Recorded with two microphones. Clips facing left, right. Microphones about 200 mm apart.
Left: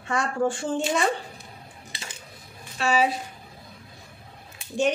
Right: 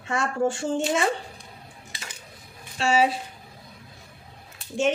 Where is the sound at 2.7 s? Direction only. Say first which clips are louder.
Right 1 dB; 30° right (ahead or behind).